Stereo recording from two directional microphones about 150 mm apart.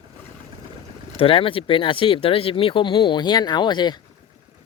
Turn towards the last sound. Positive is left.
turn(degrees=30)  # may be behind; listen again after turning